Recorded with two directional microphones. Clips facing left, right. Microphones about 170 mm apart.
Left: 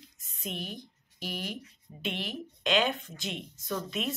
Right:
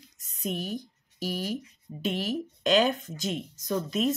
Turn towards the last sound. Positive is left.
turn(degrees=-40)  # may be behind; listen again after turning